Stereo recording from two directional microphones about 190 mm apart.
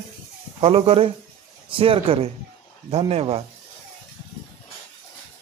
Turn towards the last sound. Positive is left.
turn(degrees=-30)  # may be behind; listen again after turning